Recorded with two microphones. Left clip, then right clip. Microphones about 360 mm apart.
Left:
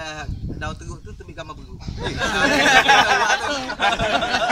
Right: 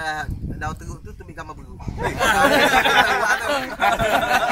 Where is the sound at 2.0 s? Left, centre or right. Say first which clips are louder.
Right 3 dB; right.